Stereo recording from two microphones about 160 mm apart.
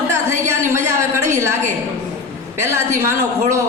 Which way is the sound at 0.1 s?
15° right (ahead or behind).